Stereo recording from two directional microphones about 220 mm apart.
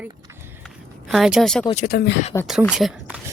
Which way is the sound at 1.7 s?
40° left (ahead or behind).